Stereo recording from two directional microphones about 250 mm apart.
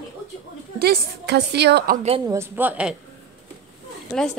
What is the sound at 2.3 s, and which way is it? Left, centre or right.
Speech, centre.